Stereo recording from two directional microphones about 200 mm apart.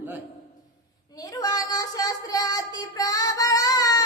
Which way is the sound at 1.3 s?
20° left (ahead or behind).